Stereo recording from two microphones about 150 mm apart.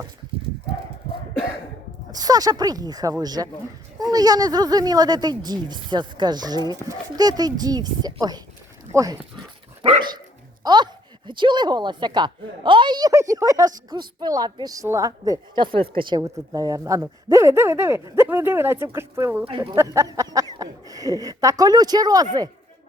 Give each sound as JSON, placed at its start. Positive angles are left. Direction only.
{"t": 2.1, "sound": "speech", "side_deg": -25}
{"t": 10.6, "sound": "speech", "side_deg": -30}
{"t": 19.5, "sound": "speech", "side_deg": -35}
{"t": 19.7, "sound": "speech", "side_deg": -20}